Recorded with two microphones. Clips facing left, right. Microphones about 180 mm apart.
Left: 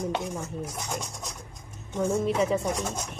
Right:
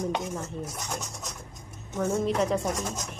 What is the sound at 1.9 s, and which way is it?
Speech, 5° left (ahead or behind).